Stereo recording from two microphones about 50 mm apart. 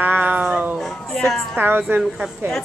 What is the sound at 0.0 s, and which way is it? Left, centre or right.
Cat, right.